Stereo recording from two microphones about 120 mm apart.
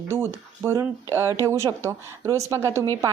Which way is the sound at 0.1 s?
20° right (ahead or behind).